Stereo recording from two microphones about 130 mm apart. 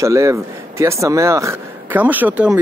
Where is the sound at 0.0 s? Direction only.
25° right (ahead or behind).